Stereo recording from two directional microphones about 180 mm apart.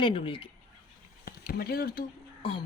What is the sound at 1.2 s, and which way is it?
Speech, 55° left (ahead or behind).